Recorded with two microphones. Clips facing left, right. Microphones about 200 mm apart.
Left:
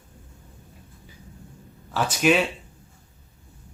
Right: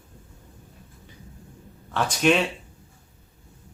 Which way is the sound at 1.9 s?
5° left (ahead or behind).